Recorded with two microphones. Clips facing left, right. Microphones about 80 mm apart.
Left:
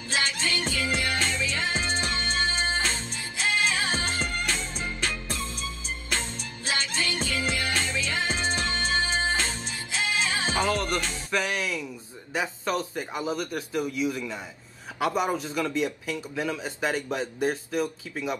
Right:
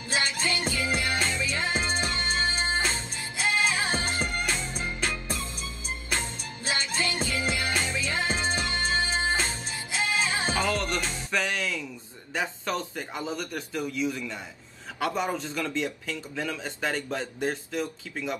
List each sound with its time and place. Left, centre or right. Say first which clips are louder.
0.1 s music: even; centre
10.5 s music: left 3 dB; left
11.3 s a man's voice: left 1 dB; centre